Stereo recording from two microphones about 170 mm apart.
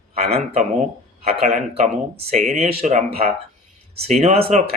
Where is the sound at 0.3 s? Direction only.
35° right (ahead or behind).